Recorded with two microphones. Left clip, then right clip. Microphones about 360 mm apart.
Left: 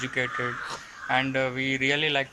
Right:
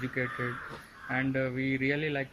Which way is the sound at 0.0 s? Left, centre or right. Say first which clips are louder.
Left 5 dB; left.